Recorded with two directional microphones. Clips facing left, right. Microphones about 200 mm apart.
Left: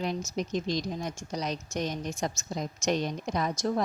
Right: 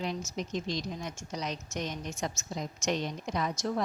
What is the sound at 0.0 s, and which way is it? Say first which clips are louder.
Speech: left 3 dB; 45° left (ahead or behind).